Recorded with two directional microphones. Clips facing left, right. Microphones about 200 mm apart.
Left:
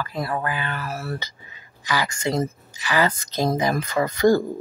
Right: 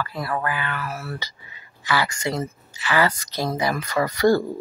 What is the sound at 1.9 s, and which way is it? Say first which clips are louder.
Speech: even; 15° left (ahead or behind).